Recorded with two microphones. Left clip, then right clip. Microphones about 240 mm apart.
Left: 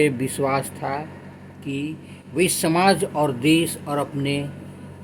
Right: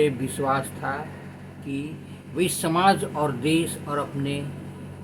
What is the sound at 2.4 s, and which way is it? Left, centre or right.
Speech, left.